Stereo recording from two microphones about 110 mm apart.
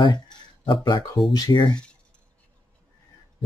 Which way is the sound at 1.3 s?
40° left (ahead or behind).